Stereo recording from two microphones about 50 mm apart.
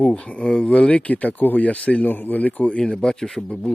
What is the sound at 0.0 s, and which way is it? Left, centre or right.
Speech, left.